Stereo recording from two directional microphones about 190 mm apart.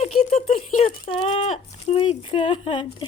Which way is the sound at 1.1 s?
30° left (ahead or behind).